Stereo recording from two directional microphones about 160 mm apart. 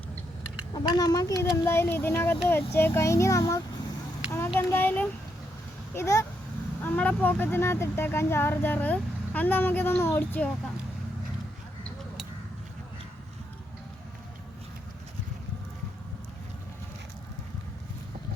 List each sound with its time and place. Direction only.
0.7 s speech: 25° left (ahead or behind)